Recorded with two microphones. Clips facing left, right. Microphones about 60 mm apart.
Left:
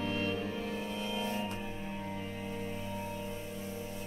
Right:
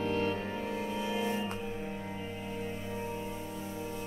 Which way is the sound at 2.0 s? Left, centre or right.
Centre.